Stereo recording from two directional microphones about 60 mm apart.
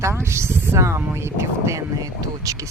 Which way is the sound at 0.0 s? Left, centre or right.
Right.